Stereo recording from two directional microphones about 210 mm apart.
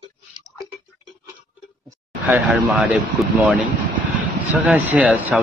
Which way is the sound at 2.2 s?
5° right (ahead or behind).